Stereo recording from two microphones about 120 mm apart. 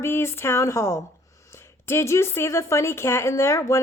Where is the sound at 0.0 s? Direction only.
20° left (ahead or behind).